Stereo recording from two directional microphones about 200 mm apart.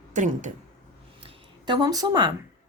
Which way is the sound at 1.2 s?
25° right (ahead or behind).